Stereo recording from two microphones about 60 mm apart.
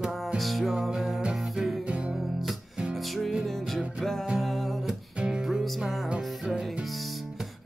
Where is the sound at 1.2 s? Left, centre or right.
Centre.